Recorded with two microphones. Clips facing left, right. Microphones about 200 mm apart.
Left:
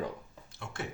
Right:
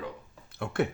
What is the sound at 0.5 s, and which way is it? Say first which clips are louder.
Speech: right 12 dB; 60° right (ahead or behind).